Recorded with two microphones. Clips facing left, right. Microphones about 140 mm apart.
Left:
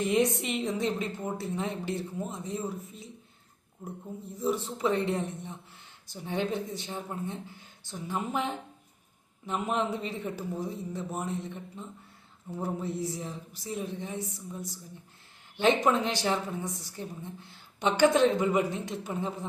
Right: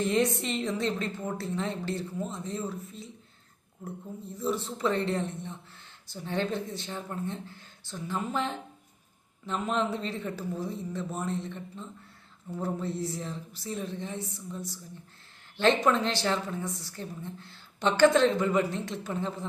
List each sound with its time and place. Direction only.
0.0 s a woman's voice: 15° left (ahead or behind)
4.4 s a woman's voice: 15° left (ahead or behind)